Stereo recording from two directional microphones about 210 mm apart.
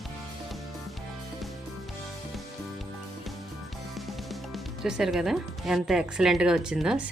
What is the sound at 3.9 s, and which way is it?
Speech, centre (ahead or behind).